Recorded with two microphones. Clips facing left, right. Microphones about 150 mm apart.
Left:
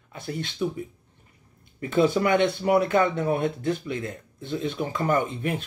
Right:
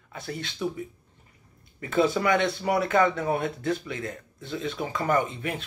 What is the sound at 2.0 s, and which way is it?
Speech, 50° left (ahead or behind).